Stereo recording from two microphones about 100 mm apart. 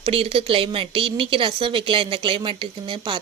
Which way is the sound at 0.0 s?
70° right (ahead or behind).